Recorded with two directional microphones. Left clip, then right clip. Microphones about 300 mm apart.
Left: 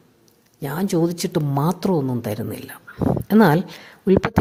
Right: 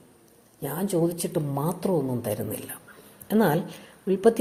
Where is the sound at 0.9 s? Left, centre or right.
Left.